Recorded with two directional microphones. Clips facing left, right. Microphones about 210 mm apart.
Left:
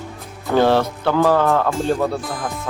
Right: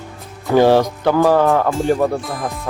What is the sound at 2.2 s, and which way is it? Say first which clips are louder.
Speech: right 2 dB; centre (ahead or behind).